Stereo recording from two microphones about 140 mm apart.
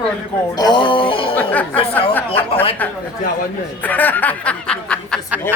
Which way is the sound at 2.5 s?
45° left (ahead or behind).